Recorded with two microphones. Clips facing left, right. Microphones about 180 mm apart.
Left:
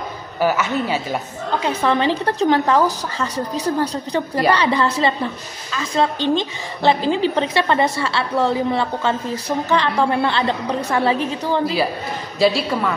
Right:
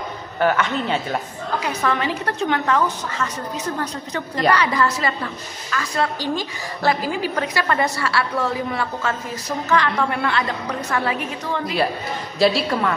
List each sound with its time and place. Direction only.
0.4 s a woman's voice: 5° left (ahead or behind)
1.6 s a woman's voice: 30° left (ahead or behind)
12.4 s a woman's voice: centre (ahead or behind)